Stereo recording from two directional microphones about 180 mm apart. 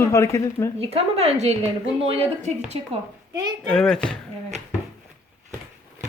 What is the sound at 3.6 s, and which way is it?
Speech, 5° left (ahead or behind).